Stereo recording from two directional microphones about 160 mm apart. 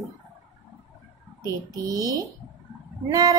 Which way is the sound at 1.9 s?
25° right (ahead or behind).